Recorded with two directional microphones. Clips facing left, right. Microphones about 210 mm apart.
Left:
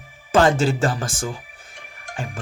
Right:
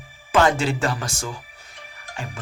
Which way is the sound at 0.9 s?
50° left (ahead or behind).